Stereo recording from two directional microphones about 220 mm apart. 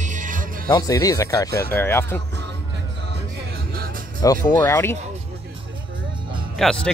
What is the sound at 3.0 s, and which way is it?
Music, 45° right (ahead or behind).